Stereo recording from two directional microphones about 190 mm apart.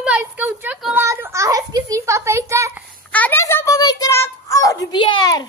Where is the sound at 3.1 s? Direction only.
10° left (ahead or behind).